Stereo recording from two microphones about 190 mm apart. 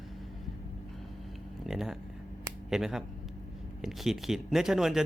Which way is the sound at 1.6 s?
Centre (ahead or behind).